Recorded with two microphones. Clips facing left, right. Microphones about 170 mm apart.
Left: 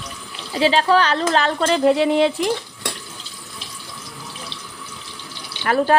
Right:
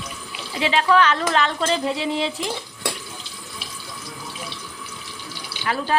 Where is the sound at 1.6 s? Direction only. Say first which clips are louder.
Left 7 dB; 55° left (ahead or behind).